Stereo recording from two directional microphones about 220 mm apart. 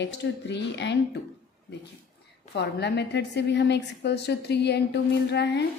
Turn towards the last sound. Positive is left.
turn(degrees=50)  # may be behind; listen again after turning